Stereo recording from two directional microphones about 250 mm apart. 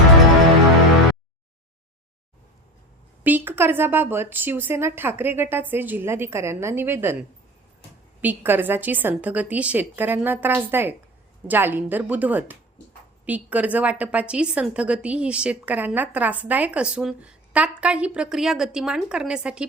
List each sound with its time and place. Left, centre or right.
3.2 s a woman's voice: centre